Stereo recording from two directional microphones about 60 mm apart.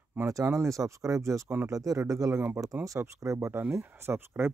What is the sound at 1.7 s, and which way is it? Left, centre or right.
Speech, right.